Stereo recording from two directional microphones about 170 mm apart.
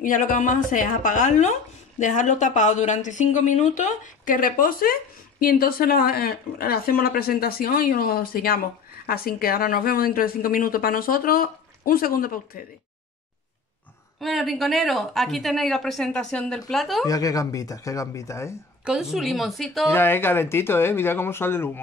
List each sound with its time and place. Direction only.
0.0 s speech: 50° left (ahead or behind)
14.2 s a woman's voice: centre (ahead or behind)
17.0 s speech: 20° left (ahead or behind)
18.9 s a woman's voice: 5° right (ahead or behind)
19.9 s speech: 10° left (ahead or behind)